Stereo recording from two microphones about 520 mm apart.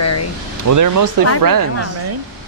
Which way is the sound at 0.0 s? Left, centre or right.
Left.